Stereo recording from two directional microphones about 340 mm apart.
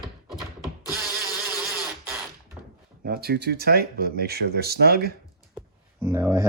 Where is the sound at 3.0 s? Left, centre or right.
Right.